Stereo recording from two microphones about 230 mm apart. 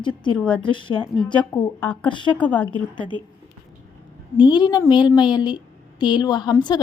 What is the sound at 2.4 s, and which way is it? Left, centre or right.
Speech, centre.